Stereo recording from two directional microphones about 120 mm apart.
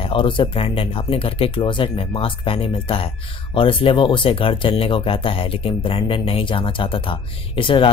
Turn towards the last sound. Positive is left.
turn(degrees=45)  # may be behind; listen again after turning